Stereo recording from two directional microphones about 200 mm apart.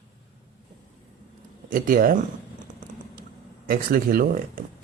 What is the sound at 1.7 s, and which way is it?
Speech, 45° right (ahead or behind).